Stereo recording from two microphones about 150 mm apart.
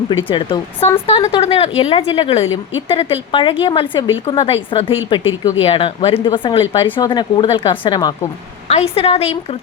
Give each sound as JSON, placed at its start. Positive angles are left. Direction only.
{"t": 0.1, "sound": "a woman's voice", "side_deg": 35}
{"t": 8.6, "sound": "a woman's voice", "side_deg": 40}